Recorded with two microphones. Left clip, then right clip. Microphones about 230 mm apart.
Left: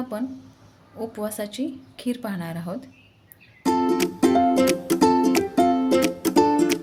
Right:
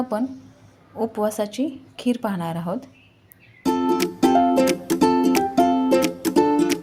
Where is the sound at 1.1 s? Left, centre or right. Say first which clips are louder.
Right 6 dB; centre.